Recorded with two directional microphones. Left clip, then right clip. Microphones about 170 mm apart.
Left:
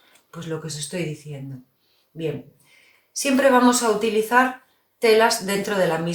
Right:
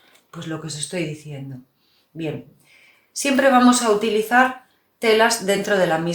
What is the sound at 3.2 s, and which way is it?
Speech, 30° right (ahead or behind).